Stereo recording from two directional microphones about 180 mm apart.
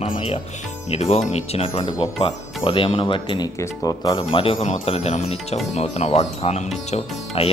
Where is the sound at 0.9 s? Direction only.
35° left (ahead or behind); by 4.2 s 20° left (ahead or behind).